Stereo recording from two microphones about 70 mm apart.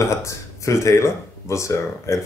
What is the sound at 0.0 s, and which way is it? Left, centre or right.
Speech, left.